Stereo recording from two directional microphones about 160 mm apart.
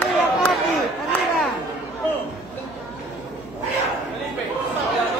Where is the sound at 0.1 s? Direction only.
Centre (ahead or behind).